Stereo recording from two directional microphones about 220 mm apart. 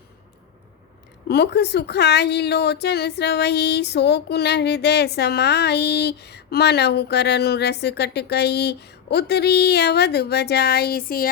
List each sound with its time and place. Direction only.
1.3 s speech: 50° left (ahead or behind)